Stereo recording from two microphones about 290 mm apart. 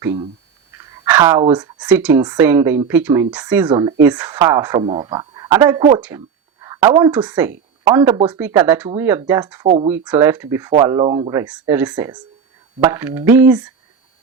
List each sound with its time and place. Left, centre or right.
0.0 s speech: centre
9.9 s speech: centre